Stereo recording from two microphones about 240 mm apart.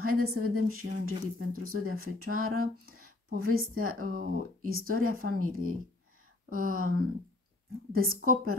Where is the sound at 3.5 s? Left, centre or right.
Right.